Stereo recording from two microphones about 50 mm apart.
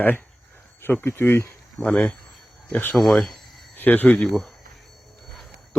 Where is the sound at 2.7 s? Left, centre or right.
Left.